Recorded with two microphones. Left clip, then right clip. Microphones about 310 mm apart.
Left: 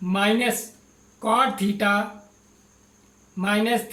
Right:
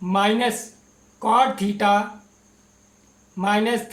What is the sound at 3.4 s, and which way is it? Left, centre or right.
Speech, centre.